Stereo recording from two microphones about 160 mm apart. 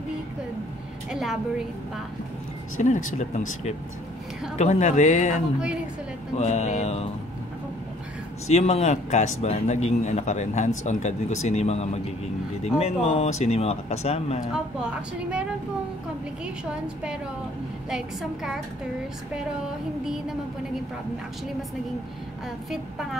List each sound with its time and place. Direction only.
1.1 s a woman's voice: 5° right (ahead or behind)
2.8 s a man's voice: 50° left (ahead or behind)
8.5 s a man's voice: 40° left (ahead or behind)
15.0 s a woman's voice: 5° right (ahead or behind)
16.4 s a woman's voice: 5° right (ahead or behind)